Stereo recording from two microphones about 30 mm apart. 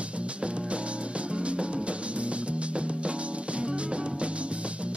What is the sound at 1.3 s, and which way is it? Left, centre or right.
Music, right.